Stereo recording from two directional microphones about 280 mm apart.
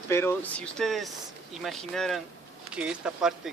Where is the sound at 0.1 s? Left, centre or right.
Centre.